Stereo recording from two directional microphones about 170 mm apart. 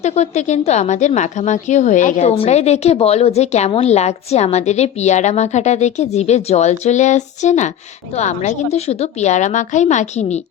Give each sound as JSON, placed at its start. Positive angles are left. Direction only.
{"t": 0.0, "sound": "a woman's voice", "side_deg": 40}